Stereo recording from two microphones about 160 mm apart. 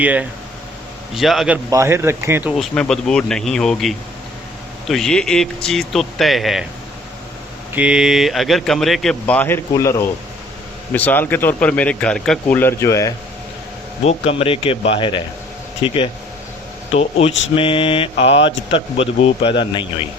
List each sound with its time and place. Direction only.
0.0 s speech: 10° right (ahead or behind)
1.7 s speech: 15° right (ahead or behind)
2.5 s speech: centre (ahead or behind)
7.7 s speech: 5° right (ahead or behind); by 13.1 s 20° left (ahead or behind)
14.0 s speech: 40° left (ahead or behind)
16.9 s speech: 40° left (ahead or behind)